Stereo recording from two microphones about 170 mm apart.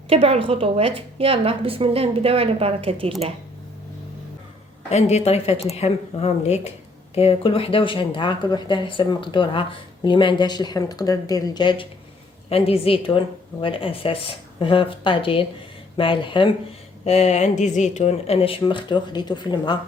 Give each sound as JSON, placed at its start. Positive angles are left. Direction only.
{"t": 0.1, "sound": "a woman's voice", "side_deg": -35}
{"t": 4.9, "sound": "speech", "side_deg": 40}
{"t": 17.0, "sound": "speech", "side_deg": 40}